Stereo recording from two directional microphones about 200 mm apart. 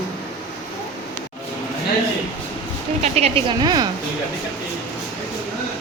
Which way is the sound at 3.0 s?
30° right (ahead or behind).